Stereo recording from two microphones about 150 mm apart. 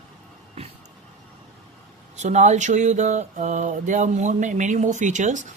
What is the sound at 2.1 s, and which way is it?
Speech, 50° right (ahead or behind).